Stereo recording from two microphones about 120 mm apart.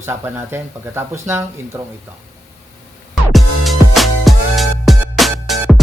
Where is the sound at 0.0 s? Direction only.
20° right (ahead or behind).